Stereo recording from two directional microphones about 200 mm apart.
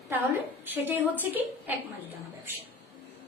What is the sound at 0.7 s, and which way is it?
Speech, 10° right (ahead or behind).